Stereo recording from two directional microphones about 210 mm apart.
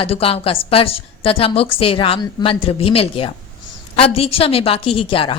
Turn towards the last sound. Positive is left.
turn(degrees=25)  # may be behind; listen again after turning